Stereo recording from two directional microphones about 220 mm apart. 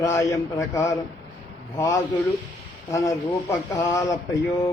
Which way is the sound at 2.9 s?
15° left (ahead or behind).